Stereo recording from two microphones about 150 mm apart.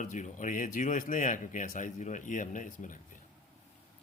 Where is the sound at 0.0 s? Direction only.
55° left (ahead or behind).